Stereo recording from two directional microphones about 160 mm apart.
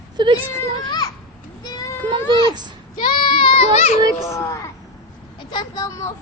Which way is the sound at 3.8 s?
45° left (ahead or behind).